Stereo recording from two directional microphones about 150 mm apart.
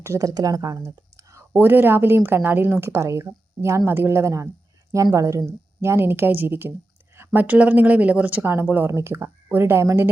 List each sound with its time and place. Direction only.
0.0 s speech: 20° right (ahead or behind)